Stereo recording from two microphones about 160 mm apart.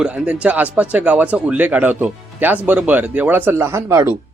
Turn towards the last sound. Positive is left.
turn(degrees=-15)  # may be behind; listen again after turning